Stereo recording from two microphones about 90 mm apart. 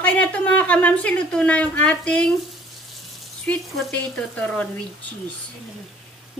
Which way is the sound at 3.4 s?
10° left (ahead or behind).